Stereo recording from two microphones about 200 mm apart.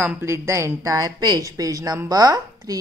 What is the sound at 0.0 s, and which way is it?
A woman's voice, 10° right (ahead or behind).